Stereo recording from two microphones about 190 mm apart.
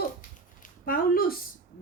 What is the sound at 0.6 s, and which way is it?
Speech, 50° left (ahead or behind).